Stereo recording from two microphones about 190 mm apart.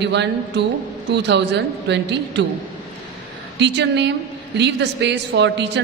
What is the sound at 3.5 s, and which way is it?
A woman's voice, 65° right (ahead or behind).